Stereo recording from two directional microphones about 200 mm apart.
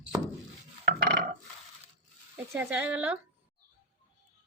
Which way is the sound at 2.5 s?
10° right (ahead or behind).